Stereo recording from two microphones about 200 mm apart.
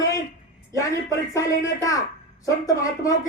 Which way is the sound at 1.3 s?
15° left (ahead or behind).